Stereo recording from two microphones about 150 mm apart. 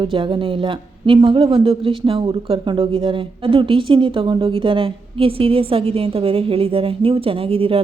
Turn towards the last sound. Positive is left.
turn(degrees=-40)  # may be behind; listen again after turning